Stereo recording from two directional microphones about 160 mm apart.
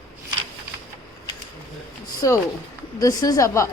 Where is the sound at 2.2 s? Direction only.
20° left (ahead or behind).